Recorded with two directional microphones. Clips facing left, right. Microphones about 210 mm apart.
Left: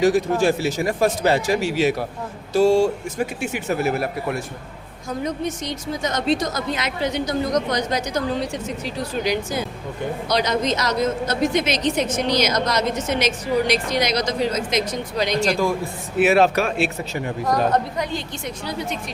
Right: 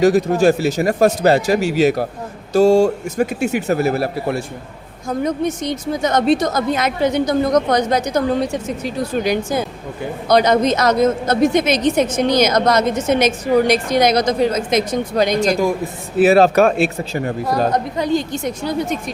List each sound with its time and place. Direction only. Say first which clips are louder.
0.0 s a woman's voice: right 5 dB; 40° right (ahead or behind)
5.2 s a woman's voice: right 6 dB; 55° right (ahead or behind)
16.1 s a woman's voice: right 5 dB; 35° right (ahead or behind)